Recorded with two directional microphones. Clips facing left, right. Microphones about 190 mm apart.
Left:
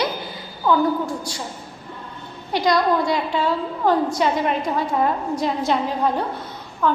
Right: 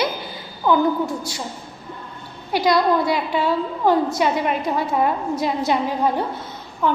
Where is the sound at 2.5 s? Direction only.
5° right (ahead or behind).